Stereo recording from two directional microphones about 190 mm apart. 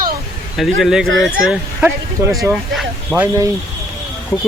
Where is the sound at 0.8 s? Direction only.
5° right (ahead or behind).